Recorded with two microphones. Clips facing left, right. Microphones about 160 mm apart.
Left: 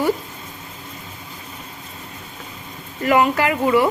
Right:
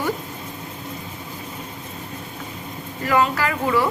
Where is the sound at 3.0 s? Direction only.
20° left (ahead or behind).